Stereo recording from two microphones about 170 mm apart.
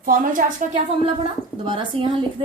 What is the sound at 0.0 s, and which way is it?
Speech, 55° right (ahead or behind).